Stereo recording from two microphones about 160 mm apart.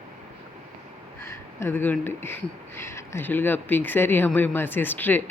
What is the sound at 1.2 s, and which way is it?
Speech, 15° left (ahead or behind).